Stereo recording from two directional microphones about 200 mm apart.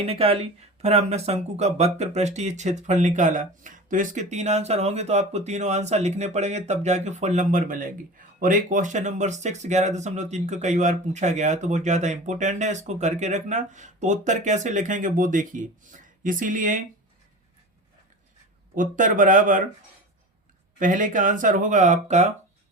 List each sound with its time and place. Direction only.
0.0 s speech: 30° right (ahead or behind)
18.7 s speech: 40° right (ahead or behind)
20.7 s speech: 40° right (ahead or behind)